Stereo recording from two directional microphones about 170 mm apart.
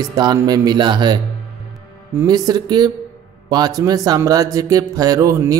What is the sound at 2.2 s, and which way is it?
Speech, 25° right (ahead or behind).